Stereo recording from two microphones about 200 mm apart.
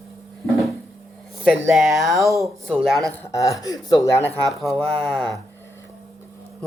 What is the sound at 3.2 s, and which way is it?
Speech, 15° left (ahead or behind).